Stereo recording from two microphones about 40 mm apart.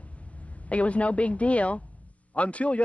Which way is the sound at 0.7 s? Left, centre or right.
Left.